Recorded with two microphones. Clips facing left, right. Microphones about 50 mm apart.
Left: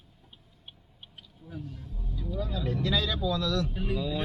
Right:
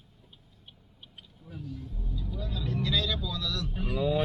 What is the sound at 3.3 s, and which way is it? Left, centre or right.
Speech, left.